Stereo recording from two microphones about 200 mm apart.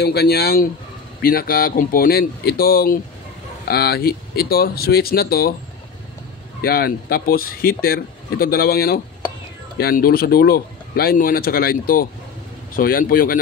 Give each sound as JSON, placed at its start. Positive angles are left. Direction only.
{"t": 0.0, "sound": "speech", "side_deg": 55}
{"t": 6.6, "sound": "speech", "side_deg": 50}